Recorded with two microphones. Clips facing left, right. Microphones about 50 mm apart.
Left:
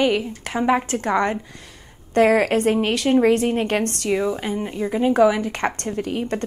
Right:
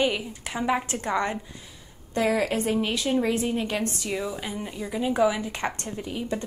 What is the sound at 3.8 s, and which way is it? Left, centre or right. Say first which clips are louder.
Speech: left 6 dB; left.